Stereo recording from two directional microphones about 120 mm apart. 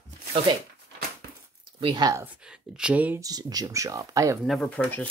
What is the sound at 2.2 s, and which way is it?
Speech, 5° right (ahead or behind).